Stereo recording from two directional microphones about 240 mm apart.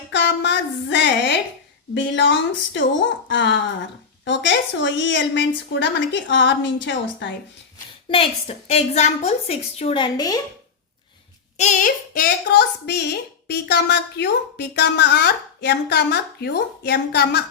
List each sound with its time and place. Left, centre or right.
0.1 s speech: left
8.1 s a woman's voice: left
11.5 s speech: left